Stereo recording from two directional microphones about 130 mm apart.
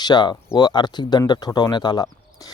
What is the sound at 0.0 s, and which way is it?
Speech, 35° left (ahead or behind).